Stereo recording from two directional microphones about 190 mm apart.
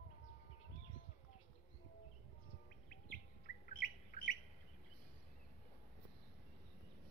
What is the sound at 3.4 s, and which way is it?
Chirp, 45° left (ahead or behind).